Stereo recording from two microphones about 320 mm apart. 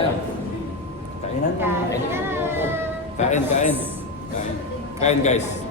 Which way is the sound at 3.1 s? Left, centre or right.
Left.